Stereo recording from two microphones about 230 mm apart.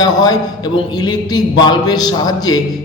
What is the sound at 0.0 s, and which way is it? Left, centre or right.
A man's voice, centre.